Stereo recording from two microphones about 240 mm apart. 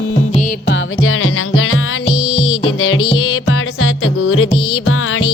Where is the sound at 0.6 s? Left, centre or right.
Left.